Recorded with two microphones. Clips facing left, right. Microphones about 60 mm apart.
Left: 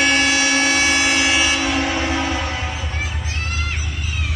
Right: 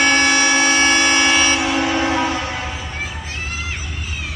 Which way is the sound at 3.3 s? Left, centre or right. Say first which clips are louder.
Left 1 dB; centre.